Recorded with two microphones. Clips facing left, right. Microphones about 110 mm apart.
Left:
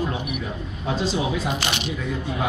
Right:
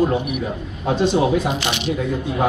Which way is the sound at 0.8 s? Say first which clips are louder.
Right 7 dB; 55° right (ahead or behind).